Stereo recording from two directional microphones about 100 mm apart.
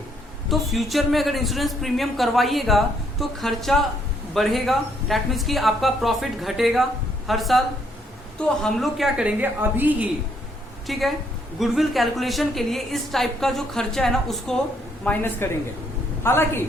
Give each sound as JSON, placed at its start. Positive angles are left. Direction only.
{"t": 0.4, "sound": "a man's voice", "side_deg": 0}
{"t": 10.8, "sound": "a woman's voice", "side_deg": 0}
{"t": 15.0, "sound": "a woman's voice", "side_deg": 20}